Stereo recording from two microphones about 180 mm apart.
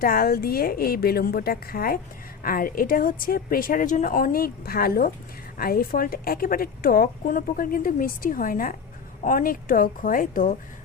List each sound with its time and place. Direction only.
0.0 s a woman's voice: 55° left (ahead or behind)